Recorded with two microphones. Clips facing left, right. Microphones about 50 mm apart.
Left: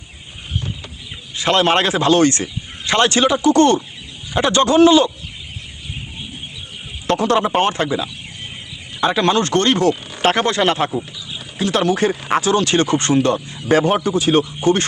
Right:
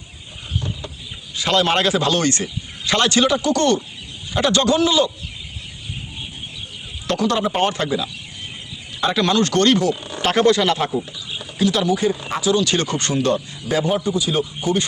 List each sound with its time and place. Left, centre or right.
1.4 s speech: left
7.1 s speech: left
11.9 s speech: left
12.7 s speech: left
13.7 s speech: left